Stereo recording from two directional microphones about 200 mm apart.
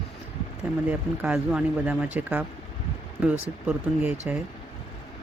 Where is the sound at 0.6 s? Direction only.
10° right (ahead or behind).